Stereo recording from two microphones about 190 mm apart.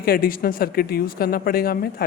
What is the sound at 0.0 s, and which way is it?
Speech, 50° left (ahead or behind).